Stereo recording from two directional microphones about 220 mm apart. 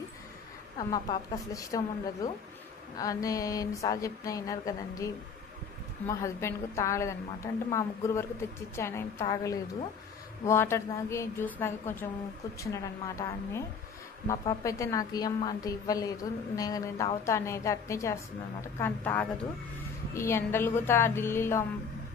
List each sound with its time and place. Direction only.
0.7 s a woman's voice: 20° left (ahead or behind)
3.0 s a woman's voice: 15° left (ahead or behind)